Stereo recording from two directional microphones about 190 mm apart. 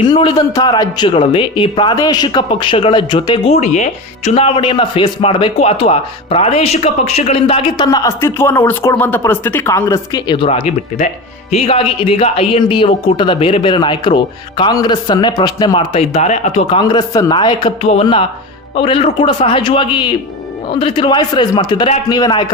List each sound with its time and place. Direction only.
0.1 s speech: 25° left (ahead or behind)
16.8 s speech: 20° left (ahead or behind)